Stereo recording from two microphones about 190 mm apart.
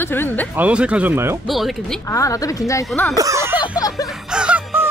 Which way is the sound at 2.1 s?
15° left (ahead or behind).